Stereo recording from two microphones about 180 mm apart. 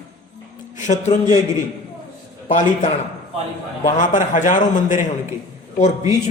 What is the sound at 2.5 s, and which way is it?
A man's voice, 45° left (ahead or behind).